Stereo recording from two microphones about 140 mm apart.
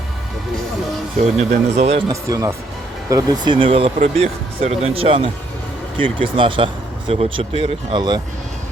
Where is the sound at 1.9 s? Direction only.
25° right (ahead or behind).